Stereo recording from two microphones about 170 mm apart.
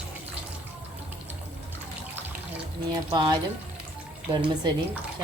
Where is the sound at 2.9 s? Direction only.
25° right (ahead or behind).